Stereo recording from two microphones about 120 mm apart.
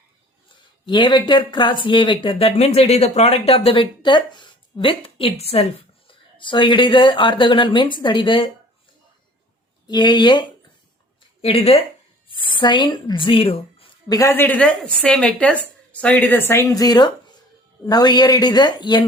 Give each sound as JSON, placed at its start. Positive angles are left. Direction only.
{"t": 0.9, "sound": "speech", "side_deg": 40}
{"t": 6.4, "sound": "speech", "side_deg": 45}
{"t": 9.8, "sound": "speech", "side_deg": 40}
{"t": 11.2, "sound": "a woman's voice", "side_deg": 55}
{"t": 12.3, "sound": "speech", "side_deg": 45}
{"t": 14.1, "sound": "a woman's voice", "side_deg": 25}